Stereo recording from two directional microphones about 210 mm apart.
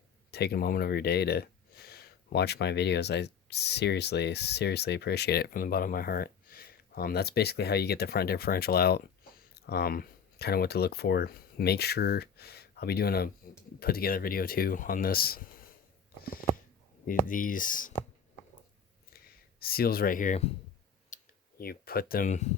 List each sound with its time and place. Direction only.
0.3 s speech: 50° left (ahead or behind)
17.1 s speech: 40° left (ahead or behind)
19.1 s a sound: 45° left (ahead or behind)
21.6 s speech: 45° left (ahead or behind)